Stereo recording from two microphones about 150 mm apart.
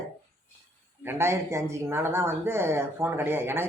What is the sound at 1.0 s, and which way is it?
Speech, 15° right (ahead or behind).